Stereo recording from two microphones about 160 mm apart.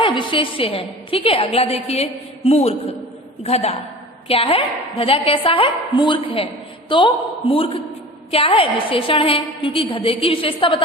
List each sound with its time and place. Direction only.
0.0 s a woman's voice: 30° left (ahead or behind)